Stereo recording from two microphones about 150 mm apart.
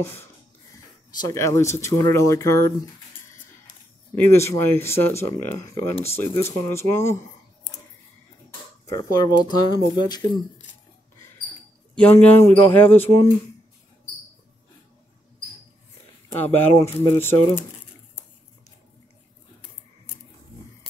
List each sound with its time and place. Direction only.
0.0 s speech: 15° left (ahead or behind)
4.1 s speech: 15° left (ahead or behind)
8.8 s speech: 25° left (ahead or behind)
11.9 s speech: 10° left (ahead or behind)
16.3 s speech: 15° left (ahead or behind)